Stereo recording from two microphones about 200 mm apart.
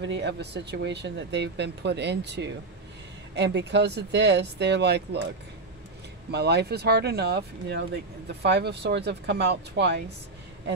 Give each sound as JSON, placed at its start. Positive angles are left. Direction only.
{"t": 0.0, "sound": "speech", "side_deg": -60}
{"t": 6.3, "sound": "speech", "side_deg": -55}